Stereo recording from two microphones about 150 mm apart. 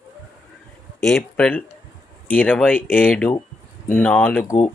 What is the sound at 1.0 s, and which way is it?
Speech, 5° left (ahead or behind).